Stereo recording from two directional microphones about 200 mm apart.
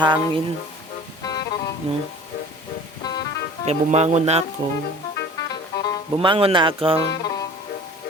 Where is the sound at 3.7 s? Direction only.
35° right (ahead or behind).